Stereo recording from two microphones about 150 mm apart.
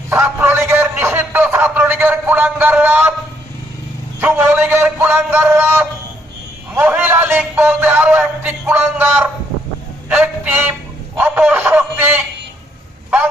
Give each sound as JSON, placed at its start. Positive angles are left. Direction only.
{"t": 0.1, "sound": "a man's voice", "side_deg": -15}
{"t": 0.7, "sound": "a sound", "side_deg": -15}
{"t": 4.2, "sound": "speech", "side_deg": -15}